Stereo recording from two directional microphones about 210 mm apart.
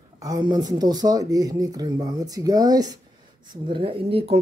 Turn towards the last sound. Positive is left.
turn(degrees=-30)  # may be behind; listen again after turning